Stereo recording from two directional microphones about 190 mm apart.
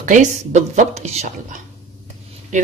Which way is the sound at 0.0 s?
40° right (ahead or behind).